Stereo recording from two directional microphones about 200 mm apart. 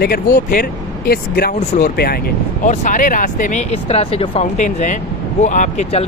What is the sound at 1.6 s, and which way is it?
Speech, 35° left (ahead or behind).